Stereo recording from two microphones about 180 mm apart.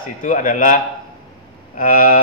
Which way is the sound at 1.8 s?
50° left (ahead or behind).